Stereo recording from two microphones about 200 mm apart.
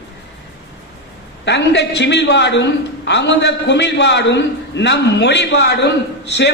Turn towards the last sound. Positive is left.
turn(degrees=55)  # may be behind; listen again after turning